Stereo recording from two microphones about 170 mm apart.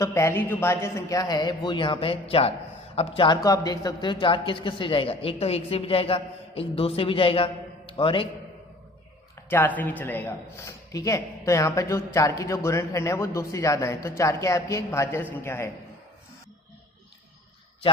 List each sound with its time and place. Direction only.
0.0 s a woman's voice: 15° left (ahead or behind)
9.5 s speech: 10° left (ahead or behind)